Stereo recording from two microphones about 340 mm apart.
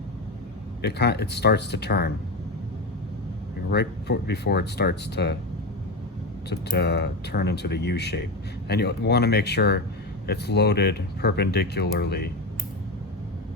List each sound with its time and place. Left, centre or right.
0.8 s speech: left
3.7 s speech: left
6.5 s speech: left